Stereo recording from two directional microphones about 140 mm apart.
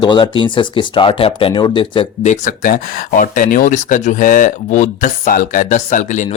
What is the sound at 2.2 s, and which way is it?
Speech, 60° left (ahead or behind).